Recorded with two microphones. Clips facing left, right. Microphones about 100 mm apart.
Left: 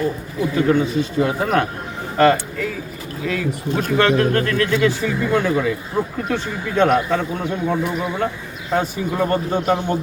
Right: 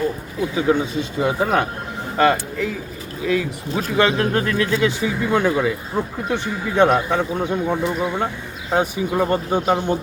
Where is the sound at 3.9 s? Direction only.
15° right (ahead or behind).